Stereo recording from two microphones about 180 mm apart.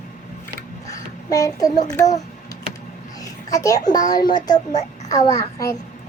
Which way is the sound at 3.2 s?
20° left (ahead or behind).